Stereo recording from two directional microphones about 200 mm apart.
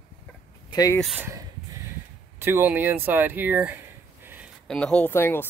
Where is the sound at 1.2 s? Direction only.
15° right (ahead or behind).